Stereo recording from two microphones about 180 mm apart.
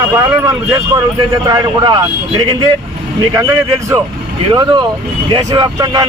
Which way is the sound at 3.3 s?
15° right (ahead or behind).